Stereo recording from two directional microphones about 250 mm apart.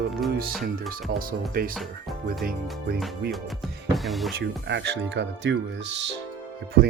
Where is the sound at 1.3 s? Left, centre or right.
Right.